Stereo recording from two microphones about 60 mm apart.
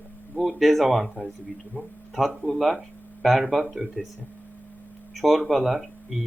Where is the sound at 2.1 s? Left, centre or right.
Centre.